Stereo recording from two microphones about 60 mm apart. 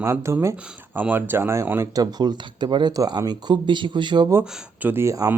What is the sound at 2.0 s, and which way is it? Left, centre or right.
Speech, right.